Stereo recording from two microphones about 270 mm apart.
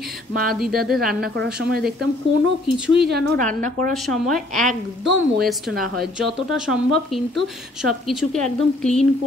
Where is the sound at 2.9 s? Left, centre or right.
Right.